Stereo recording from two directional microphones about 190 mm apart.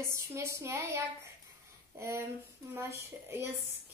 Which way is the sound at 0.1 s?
15° right (ahead or behind).